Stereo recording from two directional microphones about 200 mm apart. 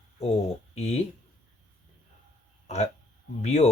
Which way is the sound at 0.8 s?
30° left (ahead or behind).